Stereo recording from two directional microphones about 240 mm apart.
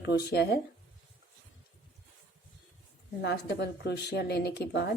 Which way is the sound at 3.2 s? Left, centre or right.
Left.